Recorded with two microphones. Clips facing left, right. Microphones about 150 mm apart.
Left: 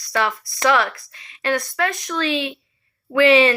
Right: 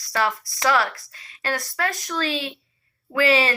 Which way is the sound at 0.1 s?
35° right (ahead or behind).